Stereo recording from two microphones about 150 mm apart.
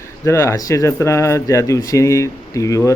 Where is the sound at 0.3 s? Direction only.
20° left (ahead or behind).